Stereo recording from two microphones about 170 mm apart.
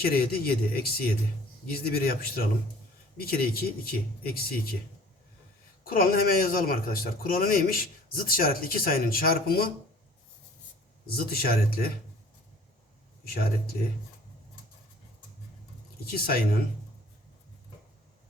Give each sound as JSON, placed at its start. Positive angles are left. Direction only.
{"t": 0.0, "sound": "a man's voice", "side_deg": 60}
{"t": 5.8, "sound": "a man's voice", "side_deg": 60}
{"t": 11.3, "sound": "a man's voice", "side_deg": 60}
{"t": 16.0, "sound": "a man's voice", "side_deg": 60}